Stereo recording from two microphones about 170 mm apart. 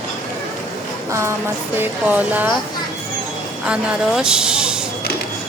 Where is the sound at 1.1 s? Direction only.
15° right (ahead or behind).